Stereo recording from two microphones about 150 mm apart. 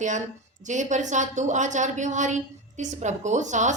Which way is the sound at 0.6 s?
55° right (ahead or behind).